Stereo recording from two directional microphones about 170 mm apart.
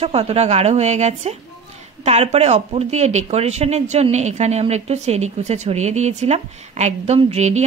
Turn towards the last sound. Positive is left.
turn(degrees=-40)  # may be behind; listen again after turning